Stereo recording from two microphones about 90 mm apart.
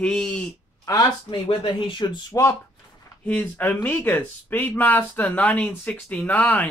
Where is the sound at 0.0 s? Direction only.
10° left (ahead or behind).